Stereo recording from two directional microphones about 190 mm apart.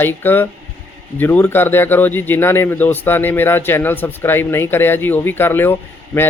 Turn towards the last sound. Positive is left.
turn(degrees=10)  # may be behind; listen again after turning